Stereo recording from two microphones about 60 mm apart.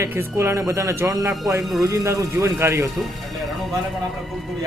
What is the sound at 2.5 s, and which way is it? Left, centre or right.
Speech, right.